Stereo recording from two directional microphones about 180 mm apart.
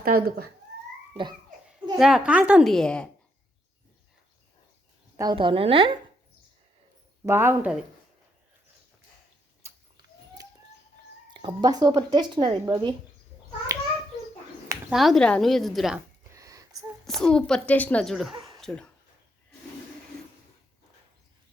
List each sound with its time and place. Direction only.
0.0 s speech: 55° right (ahead or behind)
2.0 s speech: centre (ahead or behind)
5.1 s speech: 20° right (ahead or behind)
7.3 s speech: 15° right (ahead or behind)
9.6 s a sound: 15° right (ahead or behind)
11.3 s speech: 25° right (ahead or behind)
13.7 s a sound: 20° right (ahead or behind)
14.9 s speech: centre (ahead or behind)
16.3 s a sound: 20° right (ahead or behind)
17.1 s speech: 5° left (ahead or behind)